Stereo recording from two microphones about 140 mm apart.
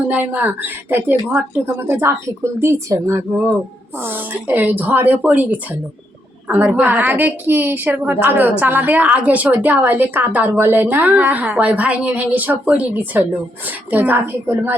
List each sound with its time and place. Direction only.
0.1 s a woman's voice: 10° right (ahead or behind)